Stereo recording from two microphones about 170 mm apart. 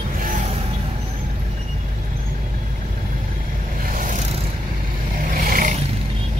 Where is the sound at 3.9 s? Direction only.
50° right (ahead or behind).